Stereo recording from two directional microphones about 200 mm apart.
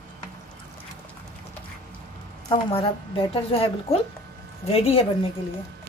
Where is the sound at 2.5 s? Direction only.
25° left (ahead or behind).